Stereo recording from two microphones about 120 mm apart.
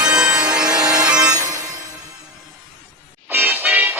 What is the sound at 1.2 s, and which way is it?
Music, 30° right (ahead or behind).